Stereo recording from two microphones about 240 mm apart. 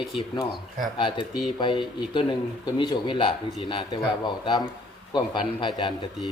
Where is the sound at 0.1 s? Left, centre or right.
Left.